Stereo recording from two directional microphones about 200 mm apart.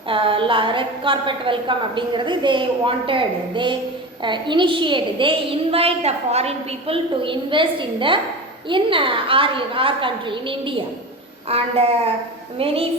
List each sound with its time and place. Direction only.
0.1 s a woman's voice: 25° right (ahead or behind)